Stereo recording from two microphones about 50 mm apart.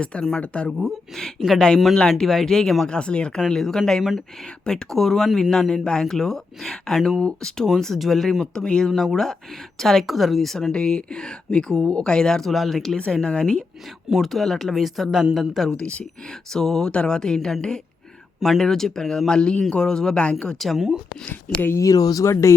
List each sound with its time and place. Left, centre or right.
0.0 s speech: centre
0.8 s speech: centre
2.8 s speech: centre
3.5 s speech: centre
8.5 s speech: centre
8.9 s speech: centre
10.7 s speech: centre
12.5 s speech: centre
13.2 s speech: centre
14.1 s speech: centre
15.8 s speech: left
16.5 s speech: centre
20.6 s speech: centre
21.8 s speech: left